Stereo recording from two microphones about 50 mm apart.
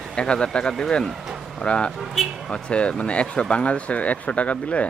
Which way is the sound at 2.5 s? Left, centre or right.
Centre.